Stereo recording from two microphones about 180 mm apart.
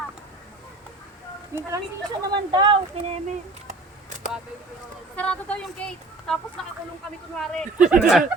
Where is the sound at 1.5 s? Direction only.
15° right (ahead or behind).